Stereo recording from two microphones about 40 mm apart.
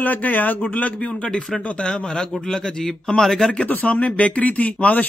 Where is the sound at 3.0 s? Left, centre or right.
Centre.